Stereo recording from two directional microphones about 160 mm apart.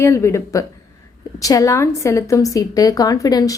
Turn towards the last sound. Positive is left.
turn(degrees=20)  # may be behind; listen again after turning